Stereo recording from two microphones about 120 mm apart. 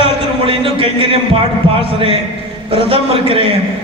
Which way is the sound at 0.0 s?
50° right (ahead or behind).